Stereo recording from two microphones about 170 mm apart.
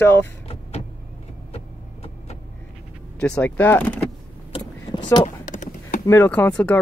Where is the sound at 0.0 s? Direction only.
10° left (ahead or behind).